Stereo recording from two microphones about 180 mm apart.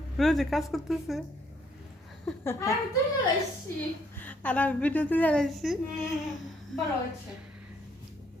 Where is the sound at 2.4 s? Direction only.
15° left (ahead or behind).